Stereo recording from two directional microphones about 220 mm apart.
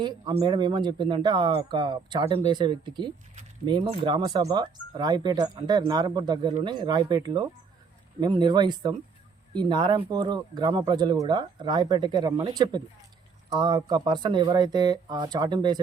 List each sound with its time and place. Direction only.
0.0 s speech: 20° right (ahead or behind)